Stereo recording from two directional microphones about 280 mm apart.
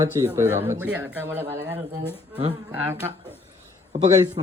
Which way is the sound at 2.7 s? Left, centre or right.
Centre.